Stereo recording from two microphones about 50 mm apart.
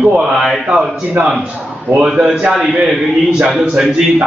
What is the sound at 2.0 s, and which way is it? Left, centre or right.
A man's voice, centre.